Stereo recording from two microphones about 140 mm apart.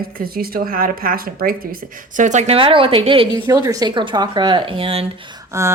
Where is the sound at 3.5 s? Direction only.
25° right (ahead or behind).